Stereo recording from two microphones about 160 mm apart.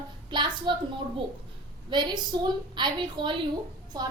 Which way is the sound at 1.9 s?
30° right (ahead or behind).